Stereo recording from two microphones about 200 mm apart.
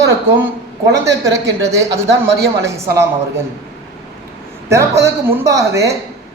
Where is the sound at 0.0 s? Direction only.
10° right (ahead or behind).